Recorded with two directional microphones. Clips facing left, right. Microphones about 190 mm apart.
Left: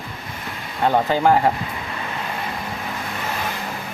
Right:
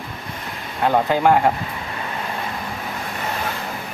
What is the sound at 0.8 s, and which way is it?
Speech, centre (ahead or behind).